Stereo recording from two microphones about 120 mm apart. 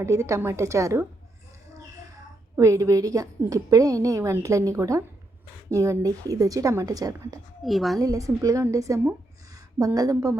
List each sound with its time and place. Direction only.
0.0 s a woman's voice: 25° right (ahead or behind)
2.6 s a woman's voice: 25° right (ahead or behind)
7.6 s a woman's voice: centre (ahead or behind)
7.9 s a woman's voice: 30° right (ahead or behind)